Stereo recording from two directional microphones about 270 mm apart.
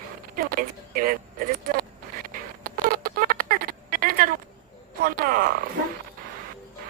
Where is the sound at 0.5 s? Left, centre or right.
Right.